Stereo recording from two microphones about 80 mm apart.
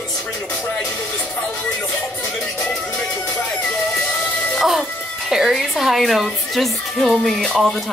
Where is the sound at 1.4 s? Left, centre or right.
Centre.